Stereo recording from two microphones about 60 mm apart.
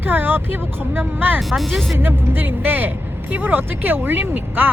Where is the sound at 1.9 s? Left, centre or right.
Right.